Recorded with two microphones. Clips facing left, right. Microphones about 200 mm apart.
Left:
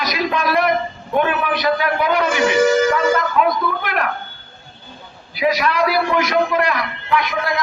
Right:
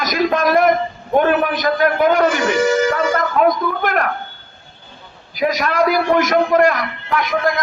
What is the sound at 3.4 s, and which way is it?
Speech, 45° right (ahead or behind).